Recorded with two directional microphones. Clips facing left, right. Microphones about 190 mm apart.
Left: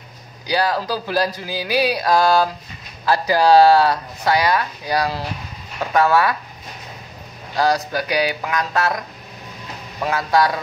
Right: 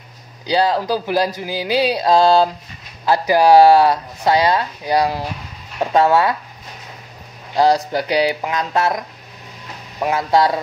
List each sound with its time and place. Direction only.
0.5 s speech: 20° right (ahead or behind)
7.5 s speech: 25° right (ahead or behind)